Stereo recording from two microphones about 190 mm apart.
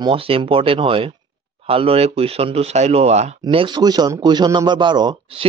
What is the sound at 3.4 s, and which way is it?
Speech, 25° right (ahead or behind).